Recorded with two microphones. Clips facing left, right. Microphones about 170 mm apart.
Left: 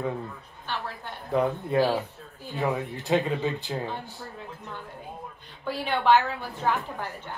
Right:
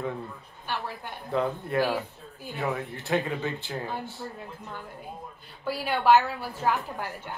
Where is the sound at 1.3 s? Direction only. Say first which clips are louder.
Left 3 dB; 15° left (ahead or behind).